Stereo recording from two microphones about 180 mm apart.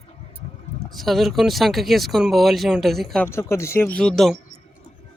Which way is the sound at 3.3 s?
15° left (ahead or behind).